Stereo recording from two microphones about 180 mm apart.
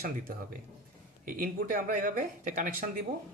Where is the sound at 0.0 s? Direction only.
55° right (ahead or behind).